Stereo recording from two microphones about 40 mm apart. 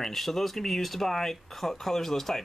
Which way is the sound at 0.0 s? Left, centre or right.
Centre.